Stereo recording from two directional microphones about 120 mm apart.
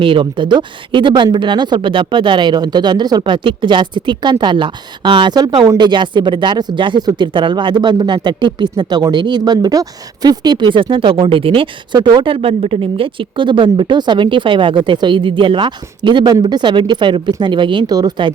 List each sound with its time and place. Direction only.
0.0 s a woman's voice: 45° right (ahead or behind)